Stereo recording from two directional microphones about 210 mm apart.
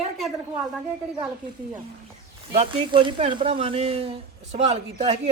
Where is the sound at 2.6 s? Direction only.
25° right (ahead or behind).